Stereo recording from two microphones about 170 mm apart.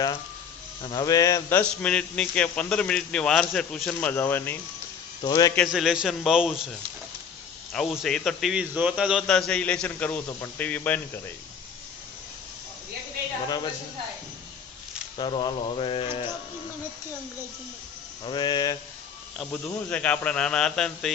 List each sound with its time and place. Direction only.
0.8 s speech: 25° left (ahead or behind)
5.2 s a sound: 20° left (ahead or behind)
5.7 s speech: 5° right (ahead or behind)
9.2 s speech: 5° left (ahead or behind)
15.2 s speech: 25° left (ahead or behind)
18.3 s a sound: 25° left (ahead or behind)
19.4 s speech: 5° left (ahead or behind)